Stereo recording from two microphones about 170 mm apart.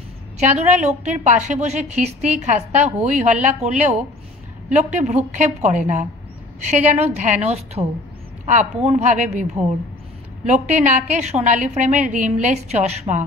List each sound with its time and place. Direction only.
0.4 s a woman's voice: 45° right (ahead or behind)